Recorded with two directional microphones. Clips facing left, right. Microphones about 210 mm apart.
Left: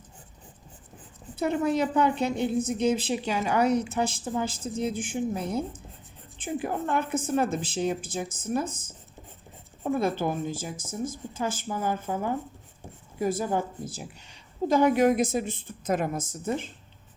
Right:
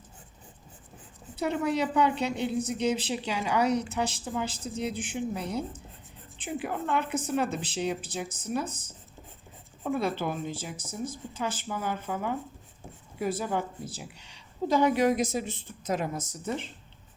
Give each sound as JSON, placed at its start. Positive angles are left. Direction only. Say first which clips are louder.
{"t": 1.4, "sound": "a woman's voice", "louder": "left 3 dB", "side_deg": 50}
{"t": 10.0, "sound": "a woman's voice", "louder": "left 4 dB", "side_deg": 45}